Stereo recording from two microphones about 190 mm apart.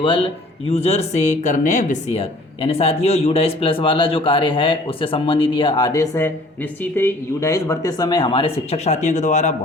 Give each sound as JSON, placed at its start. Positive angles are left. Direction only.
{"t": 0.7, "sound": "speech", "side_deg": 35}